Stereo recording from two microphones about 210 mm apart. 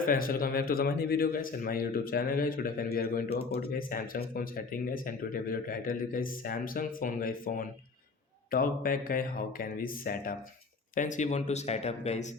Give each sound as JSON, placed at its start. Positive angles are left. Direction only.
{"t": 0.0, "sound": "a man's voice", "side_deg": 40}